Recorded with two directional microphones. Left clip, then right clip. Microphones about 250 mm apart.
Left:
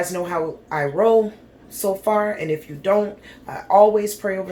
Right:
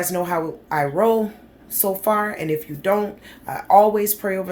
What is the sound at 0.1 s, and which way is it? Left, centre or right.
Speech, right.